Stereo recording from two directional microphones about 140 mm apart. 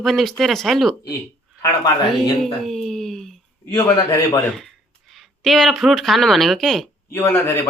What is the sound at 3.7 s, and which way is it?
Speech, 25° left (ahead or behind).